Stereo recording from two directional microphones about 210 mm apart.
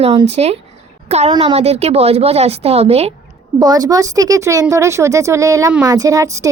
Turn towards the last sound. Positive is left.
turn(degrees=-15)  # may be behind; listen again after turning